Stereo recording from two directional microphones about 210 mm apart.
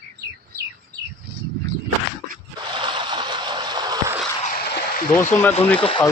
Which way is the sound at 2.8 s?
20° right (ahead or behind).